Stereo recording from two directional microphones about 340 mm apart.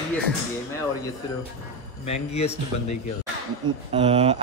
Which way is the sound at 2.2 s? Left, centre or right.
Centre.